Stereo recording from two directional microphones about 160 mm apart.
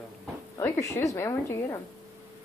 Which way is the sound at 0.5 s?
20° left (ahead or behind).